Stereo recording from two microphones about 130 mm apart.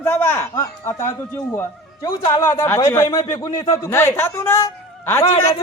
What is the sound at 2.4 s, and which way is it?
A man's voice, 20° left (ahead or behind).